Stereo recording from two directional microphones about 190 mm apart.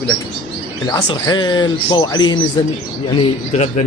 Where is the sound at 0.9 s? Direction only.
20° left (ahead or behind).